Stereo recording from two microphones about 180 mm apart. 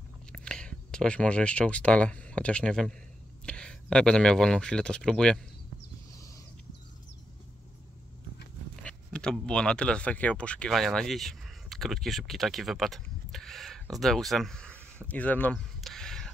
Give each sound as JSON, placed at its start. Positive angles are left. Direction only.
{"t": 0.3, "sound": "speech", "side_deg": 5}
{"t": 6.1, "sound": "a sound", "side_deg": 20}
{"t": 8.8, "sound": "speech", "side_deg": 5}